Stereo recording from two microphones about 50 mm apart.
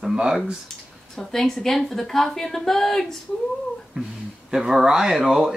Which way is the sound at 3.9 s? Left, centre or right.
Right.